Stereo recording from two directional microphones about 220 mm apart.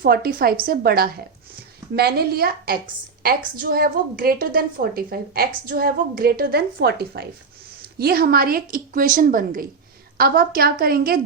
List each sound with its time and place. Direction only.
0.0 s a woman's voice: 45° right (ahead or behind)